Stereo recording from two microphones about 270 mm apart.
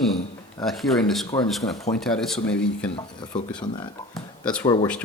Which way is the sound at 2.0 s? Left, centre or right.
Centre.